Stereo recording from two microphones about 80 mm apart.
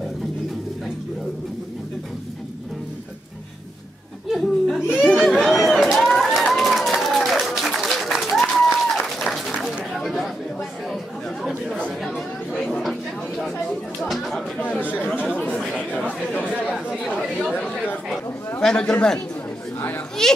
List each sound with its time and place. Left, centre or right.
4.3 s a sound: centre
4.9 s run: centre
8.3 s a sound: centre
12.5 s chatter: centre
14.0 s chatter: centre
14.8 s chatter: left
15.5 s chatter: centre
18.6 s a sound: centre
20.2 s children playing: centre